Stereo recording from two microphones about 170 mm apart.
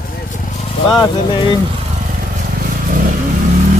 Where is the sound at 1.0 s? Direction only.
25° left (ahead or behind).